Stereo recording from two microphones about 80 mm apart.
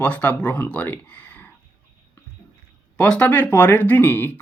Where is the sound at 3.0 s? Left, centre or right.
Centre.